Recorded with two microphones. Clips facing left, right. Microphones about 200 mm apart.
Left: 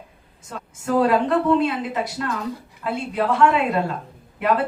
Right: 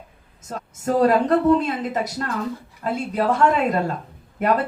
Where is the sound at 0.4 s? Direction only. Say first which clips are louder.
Right 3 dB; 40° right (ahead or behind).